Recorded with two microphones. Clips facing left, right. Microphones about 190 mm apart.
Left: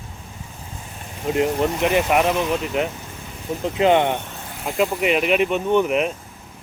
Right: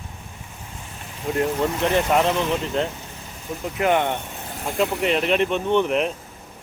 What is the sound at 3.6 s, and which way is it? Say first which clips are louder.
Speech: left 4 dB; 20° left (ahead or behind).